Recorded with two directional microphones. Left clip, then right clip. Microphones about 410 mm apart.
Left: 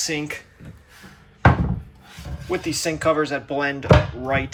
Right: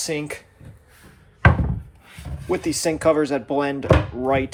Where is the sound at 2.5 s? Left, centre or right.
Centre.